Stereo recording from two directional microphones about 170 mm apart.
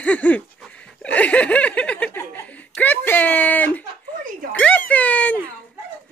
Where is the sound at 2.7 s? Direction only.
10° left (ahead or behind).